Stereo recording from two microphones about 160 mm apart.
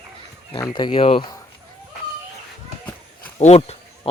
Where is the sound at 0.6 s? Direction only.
30° left (ahead or behind).